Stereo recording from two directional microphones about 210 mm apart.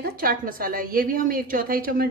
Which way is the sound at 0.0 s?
45° right (ahead or behind).